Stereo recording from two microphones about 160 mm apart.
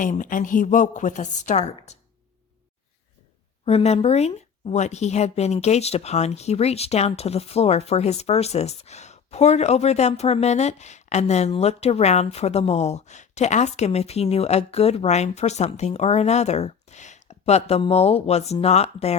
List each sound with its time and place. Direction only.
0.0 s speech: 55° left (ahead or behind)
3.7 s speech: 40° left (ahead or behind)